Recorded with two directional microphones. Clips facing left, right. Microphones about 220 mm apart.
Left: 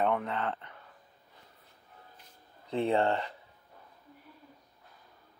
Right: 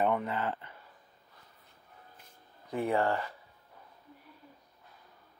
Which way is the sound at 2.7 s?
25° left (ahead or behind).